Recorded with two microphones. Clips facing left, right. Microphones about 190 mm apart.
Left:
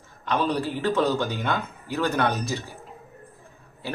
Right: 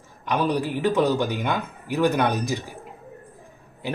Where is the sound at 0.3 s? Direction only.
15° right (ahead or behind).